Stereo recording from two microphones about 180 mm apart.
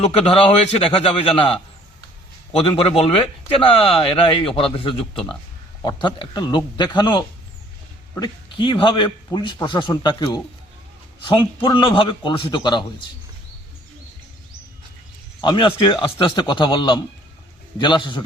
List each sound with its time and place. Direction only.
0.0 s speech: 30° left (ahead or behind)
2.6 s speech: 35° left (ahead or behind)
5.1 s speech: 5° left (ahead or behind)
6.0 s a man's voice: 25° left (ahead or behind)
15.4 s a man's voice: 25° left (ahead or behind)